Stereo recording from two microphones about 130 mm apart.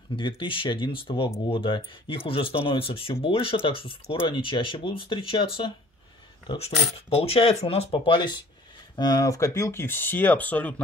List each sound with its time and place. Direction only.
0.1 s speech: 40° left (ahead or behind)
7.2 s speech: 50° left (ahead or behind); by 10.8 s 10° left (ahead or behind)